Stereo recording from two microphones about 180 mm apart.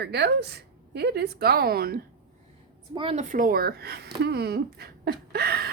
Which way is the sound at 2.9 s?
30° right (ahead or behind).